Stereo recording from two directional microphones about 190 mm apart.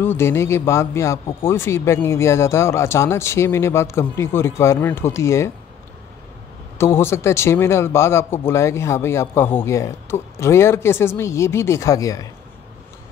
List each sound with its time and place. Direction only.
0.0 s a man's voice: 10° left (ahead or behind)
6.8 s a man's voice: 15° left (ahead or behind)